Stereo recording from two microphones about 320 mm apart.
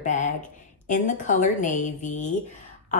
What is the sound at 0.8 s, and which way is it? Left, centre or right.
Speech, left.